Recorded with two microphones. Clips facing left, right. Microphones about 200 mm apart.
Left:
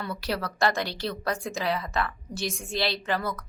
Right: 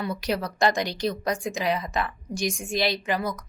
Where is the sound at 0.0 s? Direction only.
15° right (ahead or behind).